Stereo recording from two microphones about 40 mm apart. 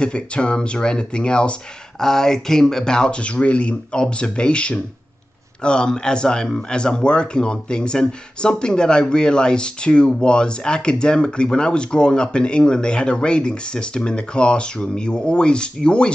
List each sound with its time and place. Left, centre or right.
0.0 s speech: left
2.0 s speech: centre